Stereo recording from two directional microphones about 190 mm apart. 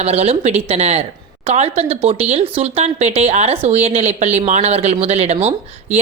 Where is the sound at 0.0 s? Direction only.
35° right (ahead or behind).